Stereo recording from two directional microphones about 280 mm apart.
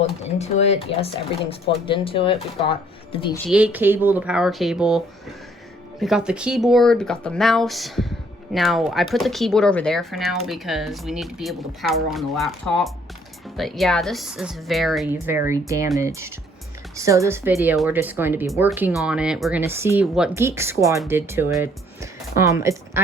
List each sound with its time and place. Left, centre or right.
0.0 s speech: left
3.4 s speech: centre